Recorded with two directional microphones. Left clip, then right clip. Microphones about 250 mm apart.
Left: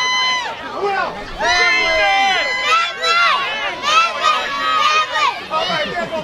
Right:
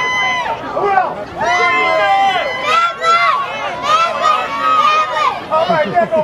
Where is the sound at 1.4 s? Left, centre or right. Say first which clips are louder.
Right 1 dB; left.